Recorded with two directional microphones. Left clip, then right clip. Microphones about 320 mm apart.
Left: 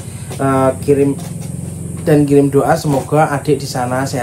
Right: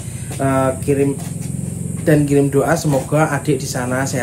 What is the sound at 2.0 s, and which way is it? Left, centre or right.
Speech, centre.